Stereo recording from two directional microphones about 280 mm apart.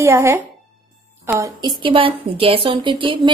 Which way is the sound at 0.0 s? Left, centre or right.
Centre.